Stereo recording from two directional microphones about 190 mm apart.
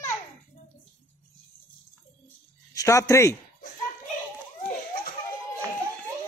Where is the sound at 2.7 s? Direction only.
15° left (ahead or behind).